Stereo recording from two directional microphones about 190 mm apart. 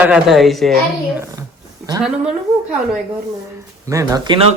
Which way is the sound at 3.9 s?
20° right (ahead or behind).